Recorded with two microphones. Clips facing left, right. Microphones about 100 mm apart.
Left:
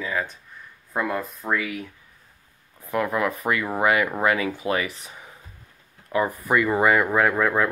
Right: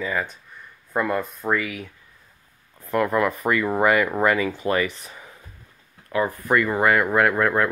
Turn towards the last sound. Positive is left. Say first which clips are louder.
# right 1 dB
turn(degrees=0)  # may be behind; listen again after turning